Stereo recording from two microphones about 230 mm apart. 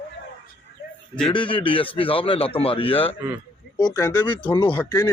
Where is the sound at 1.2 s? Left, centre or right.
Left.